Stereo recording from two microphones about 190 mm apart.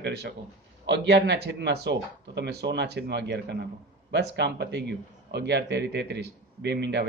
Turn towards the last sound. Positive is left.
turn(degrees=-65)  # may be behind; listen again after turning